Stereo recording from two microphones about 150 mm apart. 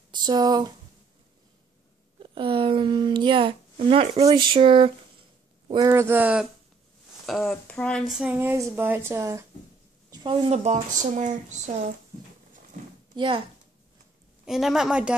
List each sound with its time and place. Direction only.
0.1 s speech: 30° right (ahead or behind)
2.1 s speech: 35° right (ahead or behind)
5.7 s a woman's voice: 25° right (ahead or behind)
7.2 s a woman's voice: centre (ahead or behind); by 9.5 s 20° right (ahead or behind)
10.1 s a woman's voice: 35° right (ahead or behind); by 11.9 s 50° right (ahead or behind)
12.7 s a sound: 60° right (ahead or behind)
13.1 s speech: 30° right (ahead or behind)
14.4 s speech: 5° right (ahead or behind)